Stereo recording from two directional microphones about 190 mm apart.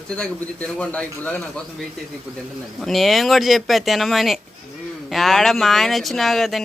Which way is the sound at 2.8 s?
Centre (ahead or behind).